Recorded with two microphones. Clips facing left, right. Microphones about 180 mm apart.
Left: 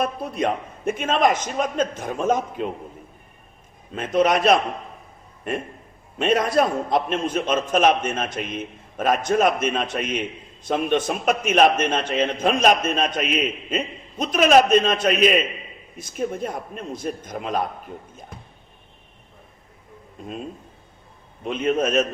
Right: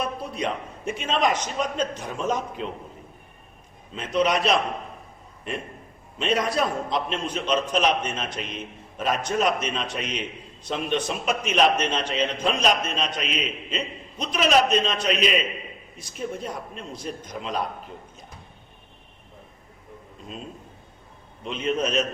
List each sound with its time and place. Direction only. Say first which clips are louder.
0.0 s a man's voice: left 5 dB; 50° left (ahead or behind)
3.9 s a man's voice: left 4 dB; 50° left (ahead or behind)
6.1 s a man's voice: left 5 dB; 50° left (ahead or behind)
16.9 s a man's voice: left 5 dB; 50° left (ahead or behind)
21.4 s a man's voice: left 4 dB; 50° left (ahead or behind)